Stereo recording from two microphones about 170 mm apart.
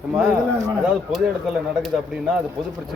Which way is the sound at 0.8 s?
5° right (ahead or behind).